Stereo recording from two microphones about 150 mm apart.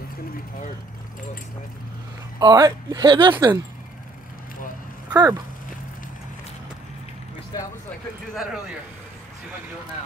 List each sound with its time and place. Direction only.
2.3 s speech: 25° right (ahead or behind)
5.1 s a sound: 25° right (ahead or behind)
7.5 s speech: 25° left (ahead or behind)